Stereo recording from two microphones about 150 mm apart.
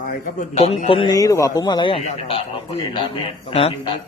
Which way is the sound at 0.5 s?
45° left (ahead or behind).